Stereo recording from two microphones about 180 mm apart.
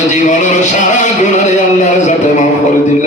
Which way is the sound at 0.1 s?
40° left (ahead or behind).